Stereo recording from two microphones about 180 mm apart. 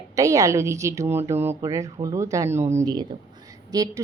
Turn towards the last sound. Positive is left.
turn(degrees=-20)  # may be behind; listen again after turning